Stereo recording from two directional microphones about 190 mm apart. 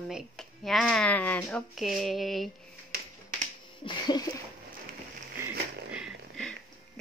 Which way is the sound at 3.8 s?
25° left (ahead or behind).